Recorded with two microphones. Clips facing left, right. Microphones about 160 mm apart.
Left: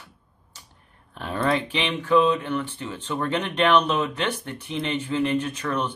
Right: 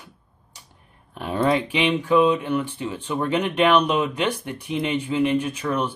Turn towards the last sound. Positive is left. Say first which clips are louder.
# right 2 dB
turn(degrees=-10)  # may be behind; listen again after turning